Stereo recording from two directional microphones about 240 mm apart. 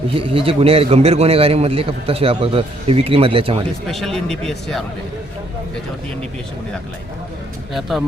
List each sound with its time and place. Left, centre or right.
0.2 s a man's voice: right
3.8 s a man's voice: centre
7.7 s a man's voice: centre